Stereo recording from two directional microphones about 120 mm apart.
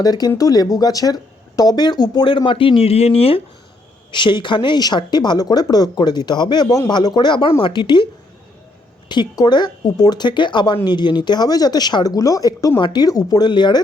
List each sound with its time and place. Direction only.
0.0 s speech: 35° left (ahead or behind); by 3.4 s 55° left (ahead or behind)
4.1 s speech: 40° left (ahead or behind)
9.0 s speech: 35° left (ahead or behind)